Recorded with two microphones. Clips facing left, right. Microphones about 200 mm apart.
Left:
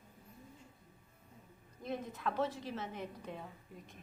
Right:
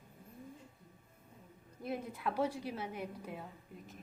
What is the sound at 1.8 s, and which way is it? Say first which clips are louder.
A woman's voice: right 1 dB; 10° right (ahead or behind).